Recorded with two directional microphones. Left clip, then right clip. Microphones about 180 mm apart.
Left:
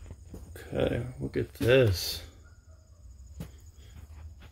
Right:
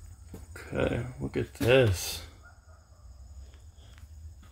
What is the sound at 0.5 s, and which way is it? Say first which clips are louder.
Speech: left 1 dB; 15° right (ahead or behind).